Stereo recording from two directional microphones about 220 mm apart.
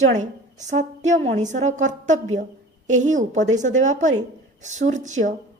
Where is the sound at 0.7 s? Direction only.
35° right (ahead or behind).